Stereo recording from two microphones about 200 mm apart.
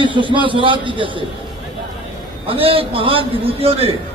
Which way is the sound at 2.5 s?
30° right (ahead or behind).